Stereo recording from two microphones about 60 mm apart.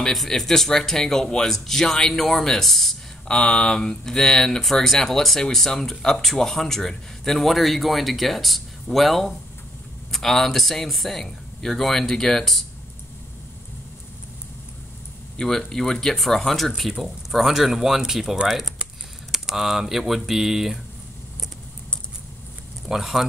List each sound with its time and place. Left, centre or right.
0.0 s speech: centre
15.3 s speech: centre
22.8 s speech: centre